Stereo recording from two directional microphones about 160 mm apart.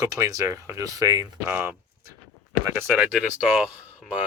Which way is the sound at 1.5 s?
15° right (ahead or behind).